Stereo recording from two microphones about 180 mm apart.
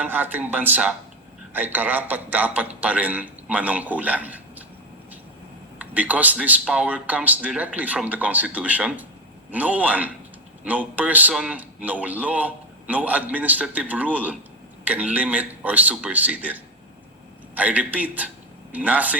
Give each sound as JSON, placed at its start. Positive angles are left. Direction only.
{"t": 0.0, "sound": "a man's voice", "side_deg": -10}
{"t": 5.8, "sound": "a man's voice", "side_deg": -10}